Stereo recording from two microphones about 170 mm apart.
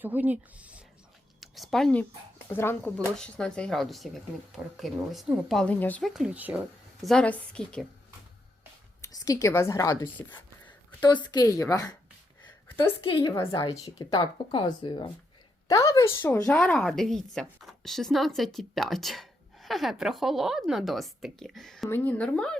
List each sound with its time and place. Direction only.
0.0 s a woman's voice: 10° right (ahead or behind); by 6.1 s 10° left (ahead or behind)
6.1 s speech: 5° right (ahead or behind)
7.0 s speech: 5° left (ahead or behind)
9.0 s a woman's voice: 20° left (ahead or behind)
10.3 s speech: 25° left (ahead or behind)
12.5 s a sound: 15° left (ahead or behind)
13.0 s speech: 30° left (ahead or behind)
13.3 s a woman's voice: 15° left (ahead or behind)
21.8 s a woman's voice: 10° left (ahead or behind)